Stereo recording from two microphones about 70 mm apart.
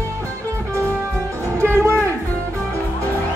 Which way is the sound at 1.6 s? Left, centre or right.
Right.